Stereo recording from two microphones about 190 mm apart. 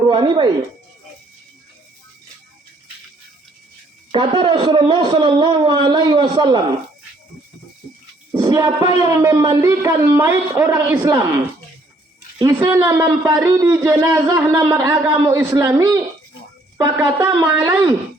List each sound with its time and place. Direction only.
0.1 s speech: 25° right (ahead or behind)
4.1 s speech: 25° right (ahead or behind)
8.4 s speech: 20° right (ahead or behind)
12.4 s speech: 10° right (ahead or behind)
13.0 s speech: 20° right (ahead or behind)